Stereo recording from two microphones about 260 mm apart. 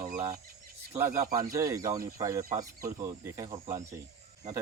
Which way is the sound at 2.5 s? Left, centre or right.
Right.